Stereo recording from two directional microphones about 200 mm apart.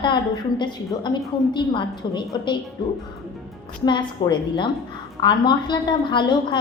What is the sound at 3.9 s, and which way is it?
A woman's voice, 25° left (ahead or behind).